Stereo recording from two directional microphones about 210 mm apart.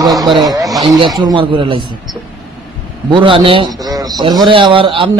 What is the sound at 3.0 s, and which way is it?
A man's voice, 25° right (ahead or behind).